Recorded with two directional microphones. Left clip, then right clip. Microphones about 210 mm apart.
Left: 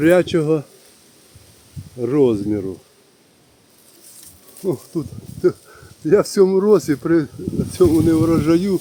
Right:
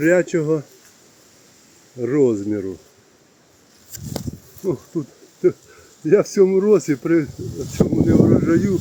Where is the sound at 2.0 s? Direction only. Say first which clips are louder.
Left 1 dB; 20° left (ahead or behind).